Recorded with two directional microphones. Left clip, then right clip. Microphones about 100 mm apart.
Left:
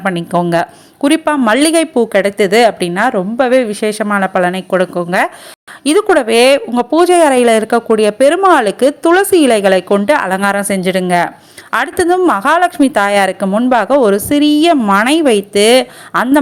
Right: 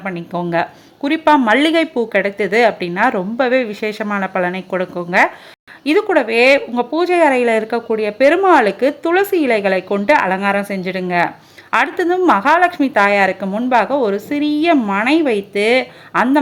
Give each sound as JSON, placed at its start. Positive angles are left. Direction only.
{"t": 0.0, "sound": "speech", "side_deg": 50}
{"t": 0.5, "sound": "a woman's voice", "side_deg": 35}
{"t": 7.1, "sound": "a woman's voice", "side_deg": 35}
{"t": 11.7, "sound": "a woman's voice", "side_deg": 35}